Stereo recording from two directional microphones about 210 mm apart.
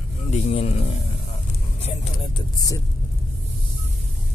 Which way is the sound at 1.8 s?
30° left (ahead or behind).